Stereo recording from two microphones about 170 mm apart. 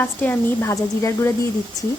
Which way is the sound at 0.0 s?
10° left (ahead or behind).